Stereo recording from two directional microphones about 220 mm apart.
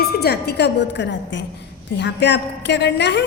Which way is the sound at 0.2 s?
45° left (ahead or behind).